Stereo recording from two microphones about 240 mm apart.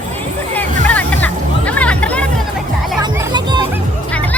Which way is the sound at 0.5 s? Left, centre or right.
Centre.